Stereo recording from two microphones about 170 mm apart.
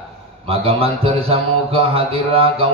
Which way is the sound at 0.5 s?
35° right (ahead or behind).